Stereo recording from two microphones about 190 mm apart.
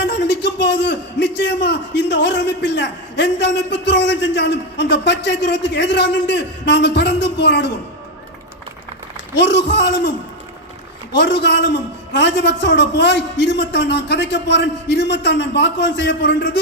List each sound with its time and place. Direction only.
0.0 s a man's voice: 65° left (ahead or behind)
9.4 s a man's voice: 65° left (ahead or behind)
11.1 s a man's voice: 65° left (ahead or behind)